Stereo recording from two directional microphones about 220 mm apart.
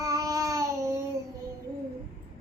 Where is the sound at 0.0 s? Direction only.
15° right (ahead or behind).